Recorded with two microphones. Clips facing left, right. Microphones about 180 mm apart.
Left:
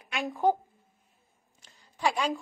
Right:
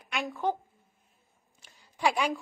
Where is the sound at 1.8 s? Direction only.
15° right (ahead or behind).